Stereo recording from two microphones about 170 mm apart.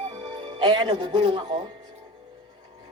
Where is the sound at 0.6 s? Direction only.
30° right (ahead or behind).